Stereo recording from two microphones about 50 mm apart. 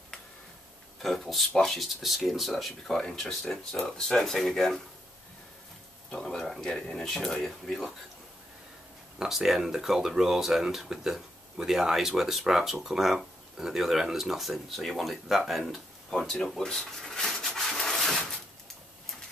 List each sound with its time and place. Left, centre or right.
0.9 s speech: centre
2.9 s speech: centre
6.0 s speech: centre
9.2 s speech: centre